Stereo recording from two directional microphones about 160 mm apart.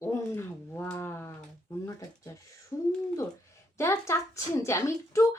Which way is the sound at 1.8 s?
20° left (ahead or behind).